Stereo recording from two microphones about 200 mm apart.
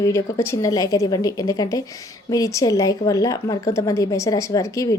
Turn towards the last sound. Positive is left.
turn(degrees=15)  # may be behind; listen again after turning